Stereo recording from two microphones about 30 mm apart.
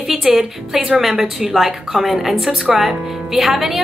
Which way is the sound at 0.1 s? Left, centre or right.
Centre.